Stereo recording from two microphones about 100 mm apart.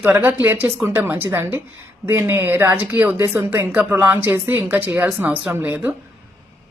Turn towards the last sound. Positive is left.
turn(degrees=-20)  # may be behind; listen again after turning